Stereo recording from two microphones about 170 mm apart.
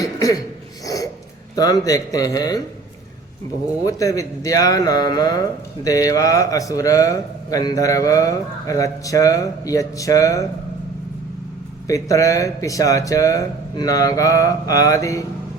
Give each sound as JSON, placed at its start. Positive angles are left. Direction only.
{"t": 0.0, "sound": "cough", "side_deg": 20}
{"t": 0.9, "sound": "a sound", "side_deg": 20}
{"t": 1.5, "sound": "speech", "side_deg": 20}
{"t": 3.8, "sound": "speech", "side_deg": 20}
{"t": 11.9, "sound": "speech", "side_deg": 20}